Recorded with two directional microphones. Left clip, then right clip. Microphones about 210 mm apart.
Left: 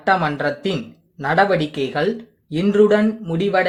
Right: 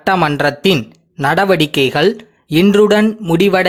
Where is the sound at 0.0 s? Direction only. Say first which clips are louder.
Right 5 dB; 35° right (ahead or behind).